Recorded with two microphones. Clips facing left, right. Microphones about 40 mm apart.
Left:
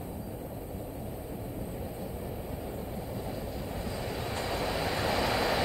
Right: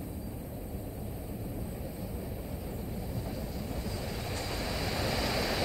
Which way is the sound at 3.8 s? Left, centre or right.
Left.